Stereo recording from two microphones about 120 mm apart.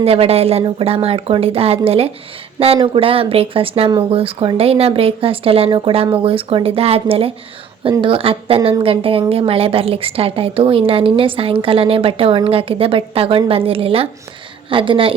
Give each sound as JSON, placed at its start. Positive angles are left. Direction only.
{"t": 0.0, "sound": "speech", "side_deg": -55}